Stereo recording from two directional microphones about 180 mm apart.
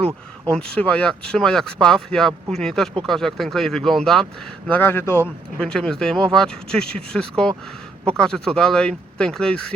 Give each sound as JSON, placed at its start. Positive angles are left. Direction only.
{"t": 0.5, "sound": "speech", "side_deg": 5}